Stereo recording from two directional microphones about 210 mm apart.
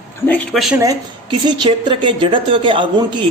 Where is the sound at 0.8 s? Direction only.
20° right (ahead or behind).